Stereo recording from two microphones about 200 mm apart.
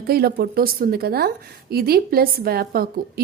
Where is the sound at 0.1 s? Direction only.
50° right (ahead or behind).